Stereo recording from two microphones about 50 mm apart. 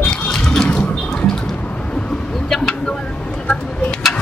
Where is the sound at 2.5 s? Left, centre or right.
Centre.